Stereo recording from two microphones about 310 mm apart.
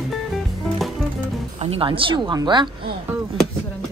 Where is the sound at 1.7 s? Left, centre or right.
Centre.